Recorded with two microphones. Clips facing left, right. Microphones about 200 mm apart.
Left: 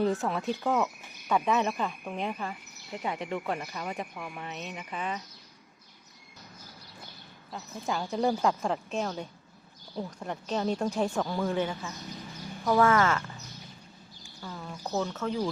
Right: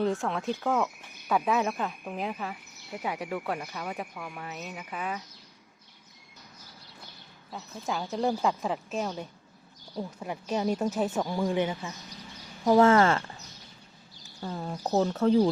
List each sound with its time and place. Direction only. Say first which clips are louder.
0.0 s speech: even; centre (ahead or behind)
7.5 s speech: even; centre (ahead or behind); by 11.9 s 15° right (ahead or behind)
12.6 s speech: right 4 dB; 25° right (ahead or behind)
14.4 s speech: right 5 dB; 40° right (ahead or behind)